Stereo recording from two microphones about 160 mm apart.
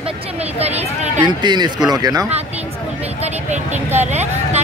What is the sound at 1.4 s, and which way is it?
Speech, 30° right (ahead or behind).